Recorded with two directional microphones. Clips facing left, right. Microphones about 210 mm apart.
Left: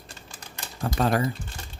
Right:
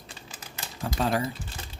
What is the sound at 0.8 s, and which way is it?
Speech, 55° left (ahead or behind).